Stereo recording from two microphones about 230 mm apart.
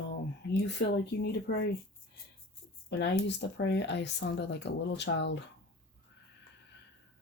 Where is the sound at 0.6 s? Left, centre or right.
Left.